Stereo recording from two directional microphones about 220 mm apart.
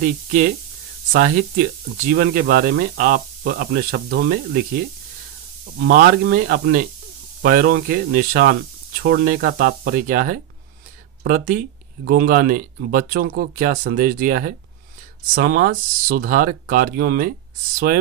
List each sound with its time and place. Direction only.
0.0 s speech: 35° right (ahead or behind)
5.9 s speech: 45° right (ahead or behind)